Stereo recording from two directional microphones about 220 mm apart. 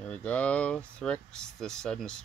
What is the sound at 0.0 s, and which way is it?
Speech, 5° left (ahead or behind).